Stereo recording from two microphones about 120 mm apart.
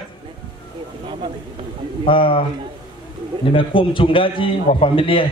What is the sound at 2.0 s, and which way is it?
Speech, 45° left (ahead or behind).